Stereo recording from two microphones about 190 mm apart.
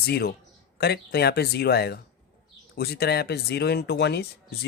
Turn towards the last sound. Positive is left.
turn(degrees=60)  # may be behind; listen again after turning